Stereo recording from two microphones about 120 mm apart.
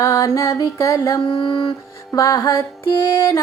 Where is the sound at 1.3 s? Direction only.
45° left (ahead or behind).